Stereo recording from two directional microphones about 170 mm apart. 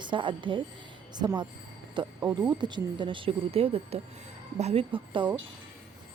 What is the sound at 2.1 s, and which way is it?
Speech, 10° right (ahead or behind).